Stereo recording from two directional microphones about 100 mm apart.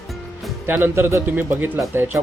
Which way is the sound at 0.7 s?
20° right (ahead or behind).